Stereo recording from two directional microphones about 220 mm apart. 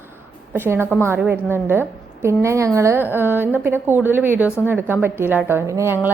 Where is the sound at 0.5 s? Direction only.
10° right (ahead or behind).